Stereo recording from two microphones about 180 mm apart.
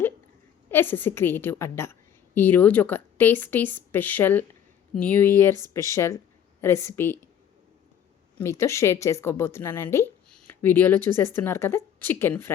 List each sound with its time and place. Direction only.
0.7 s a woman's voice: 10° left (ahead or behind)
8.4 s a woman's voice: 15° left (ahead or behind)